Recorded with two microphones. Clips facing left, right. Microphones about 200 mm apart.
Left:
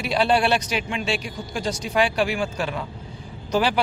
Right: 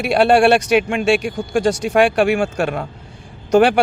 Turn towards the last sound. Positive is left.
turn(degrees=-60)  # may be behind; listen again after turning